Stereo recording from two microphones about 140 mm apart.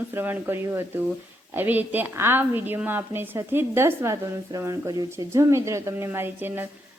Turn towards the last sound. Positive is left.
turn(degrees=-15)  # may be behind; listen again after turning